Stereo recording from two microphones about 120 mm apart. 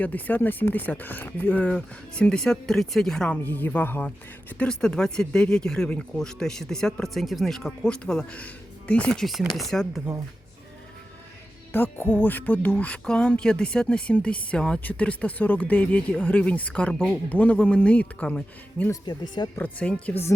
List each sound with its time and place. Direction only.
0.0 s speech: 15° left (ahead or behind)
11.7 s speech: 15° left (ahead or behind)
19.0 s speech: 40° left (ahead or behind)
19.5 s speech: 10° left (ahead or behind)